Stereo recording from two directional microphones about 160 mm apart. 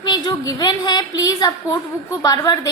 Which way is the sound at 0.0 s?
25° left (ahead or behind).